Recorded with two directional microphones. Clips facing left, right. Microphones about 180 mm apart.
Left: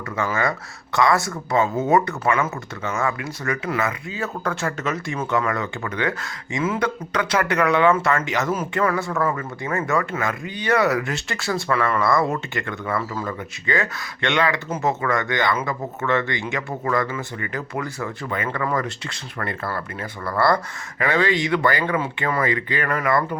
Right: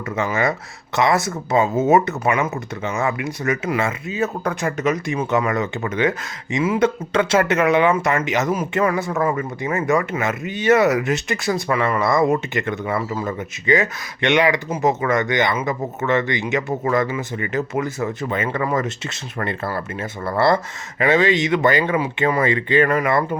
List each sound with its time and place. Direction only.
0.2 s speech: 20° right (ahead or behind)